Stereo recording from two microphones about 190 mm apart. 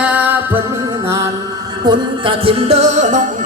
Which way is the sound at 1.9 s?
30° right (ahead or behind).